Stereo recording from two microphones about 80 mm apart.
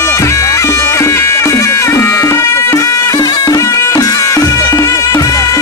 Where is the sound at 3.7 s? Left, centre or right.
Left.